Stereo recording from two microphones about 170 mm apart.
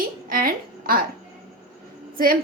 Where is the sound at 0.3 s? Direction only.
55° right (ahead or behind).